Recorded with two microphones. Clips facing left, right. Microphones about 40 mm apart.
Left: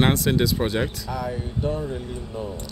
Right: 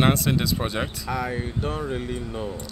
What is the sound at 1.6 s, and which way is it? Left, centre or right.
Speech, right.